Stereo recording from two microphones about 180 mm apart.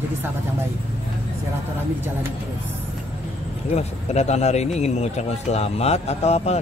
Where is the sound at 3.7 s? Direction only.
40° left (ahead or behind).